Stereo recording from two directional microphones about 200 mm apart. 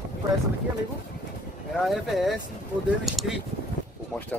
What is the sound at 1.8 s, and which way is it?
Speech, centre (ahead or behind).